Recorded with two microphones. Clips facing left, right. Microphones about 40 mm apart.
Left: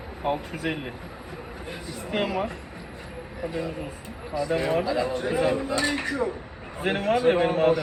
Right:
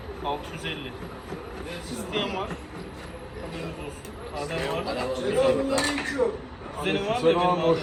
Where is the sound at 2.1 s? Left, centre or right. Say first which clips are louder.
Left 3 dB; right.